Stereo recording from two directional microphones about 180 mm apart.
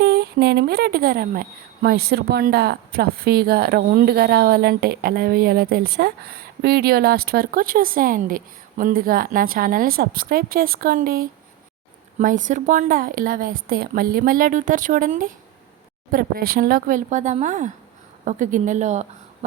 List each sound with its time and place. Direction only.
0.0 s a woman's voice: 65° right (ahead or behind); by 19.0 s 40° right (ahead or behind)